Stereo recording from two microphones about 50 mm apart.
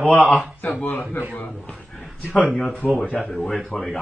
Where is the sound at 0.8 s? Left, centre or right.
Left.